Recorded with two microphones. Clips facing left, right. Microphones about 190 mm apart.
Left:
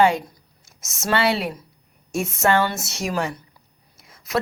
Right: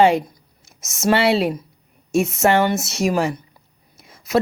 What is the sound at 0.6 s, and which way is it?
Speech, 20° right (ahead or behind).